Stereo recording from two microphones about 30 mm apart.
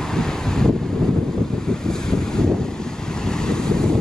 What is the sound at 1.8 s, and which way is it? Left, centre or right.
Vehicle, centre.